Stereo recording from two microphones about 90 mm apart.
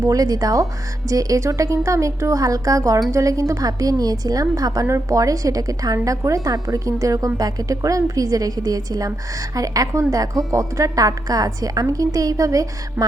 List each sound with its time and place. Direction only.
0.1 s a woman's voice: 45° right (ahead or behind)